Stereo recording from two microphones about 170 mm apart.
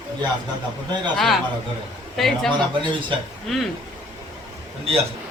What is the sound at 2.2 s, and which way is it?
A man's voice, centre (ahead or behind).